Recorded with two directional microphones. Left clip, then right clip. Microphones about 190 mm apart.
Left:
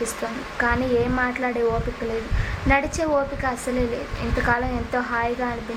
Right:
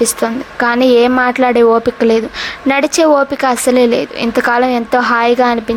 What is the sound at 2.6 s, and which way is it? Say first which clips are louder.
A woman's voice: right 11 dB; 45° right (ahead or behind).